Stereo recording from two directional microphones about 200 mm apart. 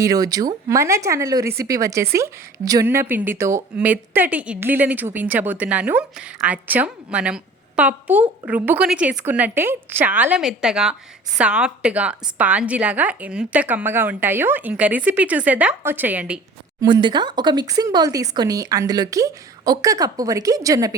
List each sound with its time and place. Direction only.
0.0 s a woman's voice: 15° right (ahead or behind)
16.8 s speech: 20° right (ahead or behind)